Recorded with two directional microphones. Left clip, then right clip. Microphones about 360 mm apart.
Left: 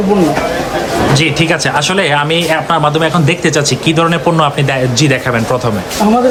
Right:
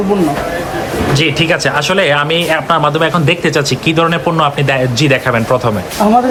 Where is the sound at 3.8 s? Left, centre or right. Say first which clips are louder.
Left 1 dB; centre.